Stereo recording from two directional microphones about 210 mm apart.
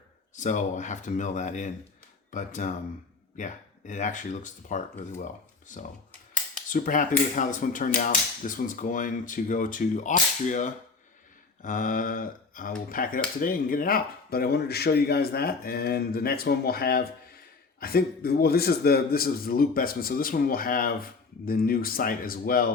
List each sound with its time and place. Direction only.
0.3 s a man's voice: 35° left (ahead or behind)